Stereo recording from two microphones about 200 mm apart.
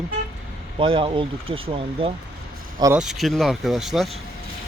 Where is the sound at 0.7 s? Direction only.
25° right (ahead or behind).